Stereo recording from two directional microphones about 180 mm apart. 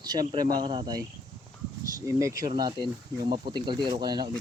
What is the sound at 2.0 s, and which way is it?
Speech, 15° right (ahead or behind).